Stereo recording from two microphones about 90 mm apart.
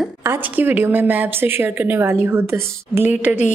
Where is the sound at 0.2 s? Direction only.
25° right (ahead or behind).